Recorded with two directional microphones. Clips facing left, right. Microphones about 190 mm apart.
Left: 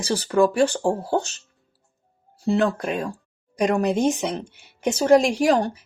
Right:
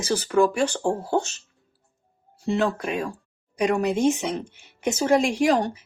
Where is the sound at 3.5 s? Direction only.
35° left (ahead or behind).